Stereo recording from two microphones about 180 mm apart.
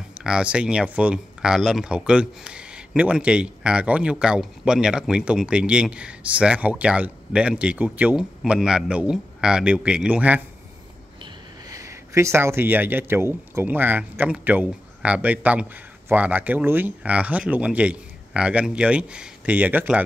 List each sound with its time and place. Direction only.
0.2 s speech: 5° right (ahead or behind)
11.7 s speech: 15° right (ahead or behind)